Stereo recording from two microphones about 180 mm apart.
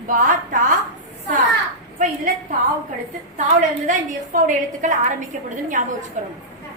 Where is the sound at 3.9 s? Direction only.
45° right (ahead or behind).